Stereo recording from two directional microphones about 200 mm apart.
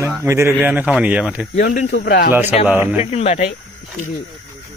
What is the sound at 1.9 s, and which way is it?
Speech, 55° left (ahead or behind).